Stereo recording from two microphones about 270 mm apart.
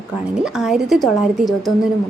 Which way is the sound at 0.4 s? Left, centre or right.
Centre.